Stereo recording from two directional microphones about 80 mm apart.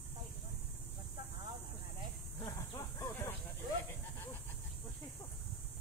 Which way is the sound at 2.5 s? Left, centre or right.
Left.